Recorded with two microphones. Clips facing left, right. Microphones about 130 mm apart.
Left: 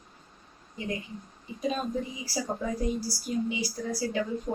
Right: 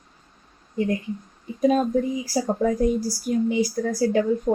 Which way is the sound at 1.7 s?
50° right (ahead or behind).